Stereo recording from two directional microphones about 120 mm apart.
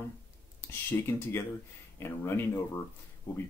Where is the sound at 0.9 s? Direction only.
20° left (ahead or behind).